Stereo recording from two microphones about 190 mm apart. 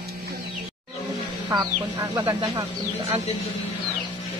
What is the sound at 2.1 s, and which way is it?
Speech, 20° right (ahead or behind).